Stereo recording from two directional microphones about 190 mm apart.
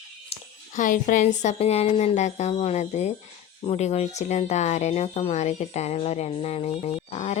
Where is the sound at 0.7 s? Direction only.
45° left (ahead or behind).